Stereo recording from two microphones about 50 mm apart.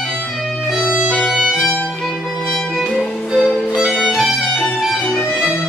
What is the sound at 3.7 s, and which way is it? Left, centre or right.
Violin, centre.